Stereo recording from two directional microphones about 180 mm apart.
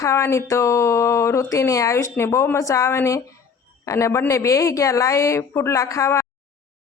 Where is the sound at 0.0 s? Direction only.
15° left (ahead or behind).